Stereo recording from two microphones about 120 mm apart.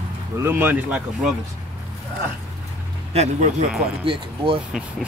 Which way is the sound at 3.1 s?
60° right (ahead or behind).